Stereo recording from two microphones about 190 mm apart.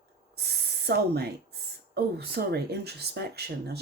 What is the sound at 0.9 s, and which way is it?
Speech, 60° right (ahead or behind).